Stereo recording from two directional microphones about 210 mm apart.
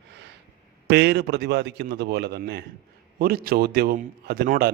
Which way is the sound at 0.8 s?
50° right (ahead or behind).